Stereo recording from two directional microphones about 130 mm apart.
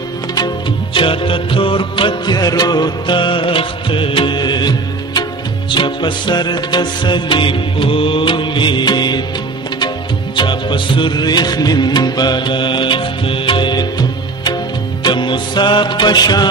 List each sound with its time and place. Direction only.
0.9 s music: 40° left (ahead or behind)
10.3 s music: 35° left (ahead or behind)